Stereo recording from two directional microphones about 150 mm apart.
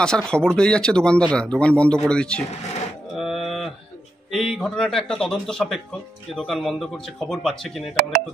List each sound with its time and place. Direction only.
0.0 s speech: 5° left (ahead or behind)
3.2 s livestock: centre (ahead or behind)
4.3 s speech: centre (ahead or behind)